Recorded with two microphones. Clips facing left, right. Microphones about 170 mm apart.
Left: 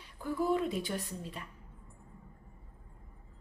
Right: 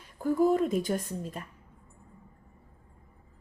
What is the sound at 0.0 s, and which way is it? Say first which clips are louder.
Speech: right 8 dB; 45° right (ahead or behind).